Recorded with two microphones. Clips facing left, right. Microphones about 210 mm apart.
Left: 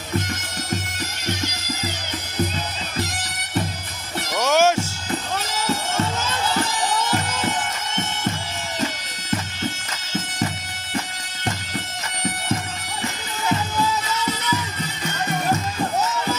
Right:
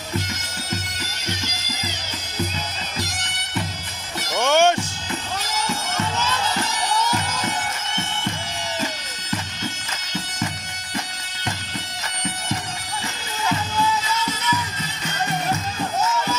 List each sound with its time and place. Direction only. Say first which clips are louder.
4.4 s music: even; 5° left (ahead or behind)